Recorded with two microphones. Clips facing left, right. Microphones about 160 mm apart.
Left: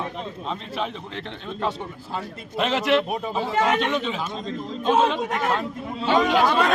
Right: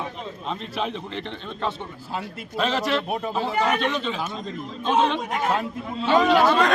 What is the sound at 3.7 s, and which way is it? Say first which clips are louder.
Speech: left 1 dB; 20° left (ahead or behind).